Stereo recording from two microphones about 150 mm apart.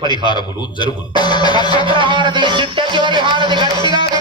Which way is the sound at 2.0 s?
30° right (ahead or behind).